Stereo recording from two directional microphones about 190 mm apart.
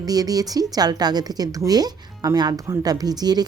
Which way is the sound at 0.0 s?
20° right (ahead or behind).